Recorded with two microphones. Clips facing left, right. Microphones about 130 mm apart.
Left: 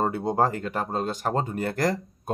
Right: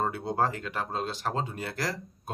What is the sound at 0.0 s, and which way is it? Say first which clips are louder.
Speech: left 5 dB; 40° left (ahead or behind).